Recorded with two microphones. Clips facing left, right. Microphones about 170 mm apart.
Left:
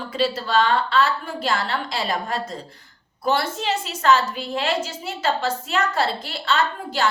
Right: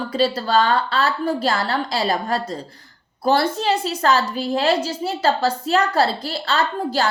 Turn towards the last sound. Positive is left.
turn(degrees=-35)  # may be behind; listen again after turning